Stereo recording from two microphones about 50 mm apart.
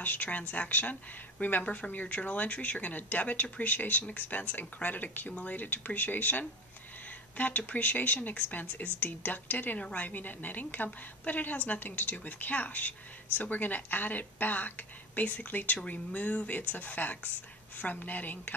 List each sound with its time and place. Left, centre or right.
0.0 s speech: left